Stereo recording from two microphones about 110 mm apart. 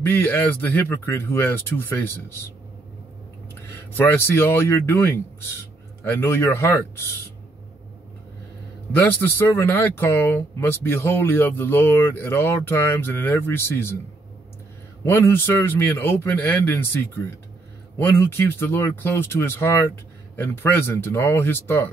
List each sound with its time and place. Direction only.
0.1 s speech: 15° left (ahead or behind)
3.9 s speech: 20° left (ahead or behind)
9.2 s speech: 20° left (ahead or behind)
15.0 s speech: 20° left (ahead or behind)